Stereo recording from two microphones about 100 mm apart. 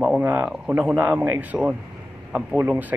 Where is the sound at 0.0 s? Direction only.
15° right (ahead or behind).